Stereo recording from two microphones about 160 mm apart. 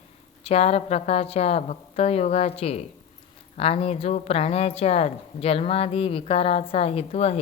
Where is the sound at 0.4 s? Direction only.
40° left (ahead or behind).